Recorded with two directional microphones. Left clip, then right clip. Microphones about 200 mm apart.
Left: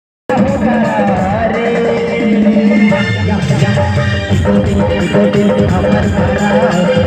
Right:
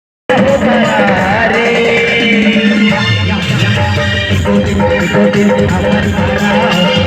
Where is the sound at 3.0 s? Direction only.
60° left (ahead or behind).